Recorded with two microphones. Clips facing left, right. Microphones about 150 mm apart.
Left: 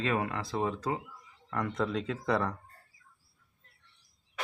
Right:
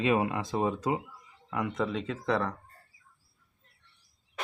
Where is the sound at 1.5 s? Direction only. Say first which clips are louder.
Right 1 dB; 5° right (ahead or behind).